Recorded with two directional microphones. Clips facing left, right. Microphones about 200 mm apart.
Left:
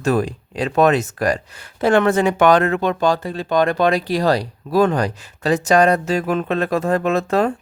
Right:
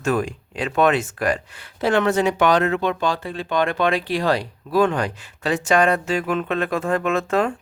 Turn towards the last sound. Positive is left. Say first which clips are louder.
# left 3 dB
turn(degrees=40)  # may be behind; listen again after turning